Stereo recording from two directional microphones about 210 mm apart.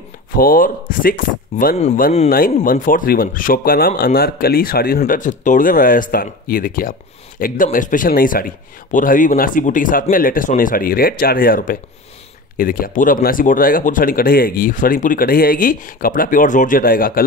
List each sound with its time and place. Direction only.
0.4 s speech: 40° left (ahead or behind)